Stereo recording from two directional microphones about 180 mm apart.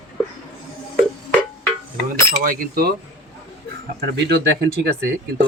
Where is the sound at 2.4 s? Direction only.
50° right (ahead or behind).